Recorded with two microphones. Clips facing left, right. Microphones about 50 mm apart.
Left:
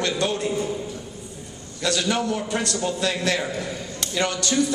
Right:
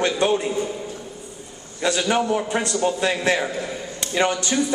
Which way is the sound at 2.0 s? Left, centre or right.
Centre.